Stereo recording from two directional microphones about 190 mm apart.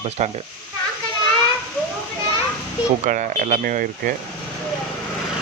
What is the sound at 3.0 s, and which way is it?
Speech, 45° right (ahead or behind).